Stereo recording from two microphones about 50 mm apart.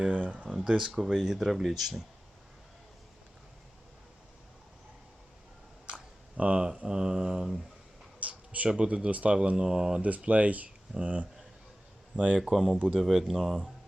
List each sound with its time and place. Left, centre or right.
0.0 s a sound: right
0.8 s speech: centre
5.8 s mantra: right
8.2 s a sound: right
8.8 s speech: centre
9.0 s speech: right; by 10.0 s centre
10.0 s speech: right
12.4 s speech: centre